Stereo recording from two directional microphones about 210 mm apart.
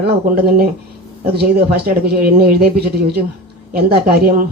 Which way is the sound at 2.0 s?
50° right (ahead or behind).